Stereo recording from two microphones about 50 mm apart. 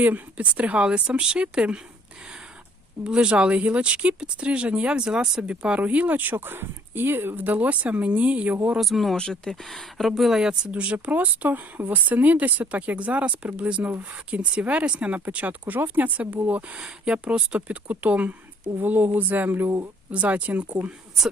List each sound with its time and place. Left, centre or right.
0.0 s speech: right
3.0 s speech: centre
5.8 s speech: right
7.4 s speech: right
8.8 s speech: centre
9.1 s speech: centre
9.6 s speech: centre
10.7 s speech: right
11.1 s speech: right
20.1 s speech: right